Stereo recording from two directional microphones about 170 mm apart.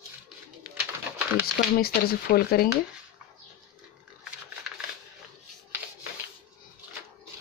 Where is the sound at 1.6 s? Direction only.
55° left (ahead or behind).